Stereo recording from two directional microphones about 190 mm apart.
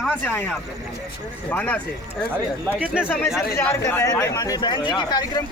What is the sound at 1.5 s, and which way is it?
Speech, 5° left (ahead or behind).